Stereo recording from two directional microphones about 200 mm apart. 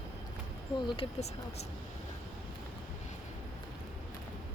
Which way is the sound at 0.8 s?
25° left (ahead or behind).